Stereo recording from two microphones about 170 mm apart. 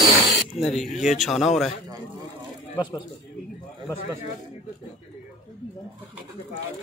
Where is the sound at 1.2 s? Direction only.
Centre (ahead or behind).